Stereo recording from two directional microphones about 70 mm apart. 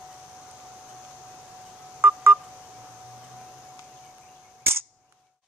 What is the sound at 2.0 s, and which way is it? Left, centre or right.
Telephone dialing, right.